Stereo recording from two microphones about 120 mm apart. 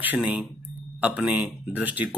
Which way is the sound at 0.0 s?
10° right (ahead or behind).